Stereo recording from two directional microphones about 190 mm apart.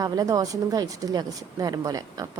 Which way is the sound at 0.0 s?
20° right (ahead or behind).